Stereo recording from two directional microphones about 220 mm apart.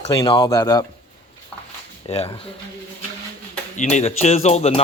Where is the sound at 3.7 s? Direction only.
30° left (ahead or behind).